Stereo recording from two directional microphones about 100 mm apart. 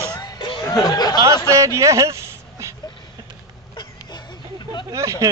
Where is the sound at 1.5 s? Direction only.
30° right (ahead or behind).